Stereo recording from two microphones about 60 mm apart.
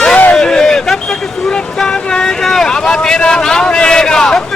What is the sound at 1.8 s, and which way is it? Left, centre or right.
Vehicle, centre.